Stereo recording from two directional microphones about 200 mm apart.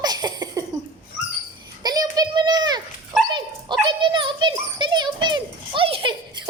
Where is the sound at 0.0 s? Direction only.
20° right (ahead or behind).